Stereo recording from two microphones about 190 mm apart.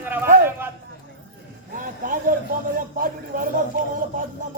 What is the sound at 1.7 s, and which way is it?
A man's voice, 45° right (ahead or behind).